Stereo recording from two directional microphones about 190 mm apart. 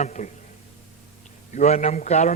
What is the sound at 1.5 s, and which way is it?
Speech, 40° left (ahead or behind).